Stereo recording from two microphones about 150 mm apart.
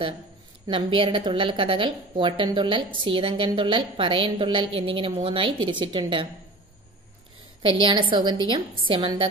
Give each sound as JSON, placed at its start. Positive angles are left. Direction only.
{"t": 0.7, "sound": "a woman's voice", "side_deg": -35}
{"t": 7.6, "sound": "a woman's voice", "side_deg": -35}